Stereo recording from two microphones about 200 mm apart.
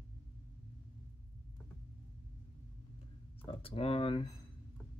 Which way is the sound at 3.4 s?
25° left (ahead or behind).